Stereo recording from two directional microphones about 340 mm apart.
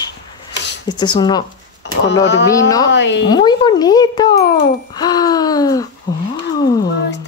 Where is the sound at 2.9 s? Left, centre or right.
Left.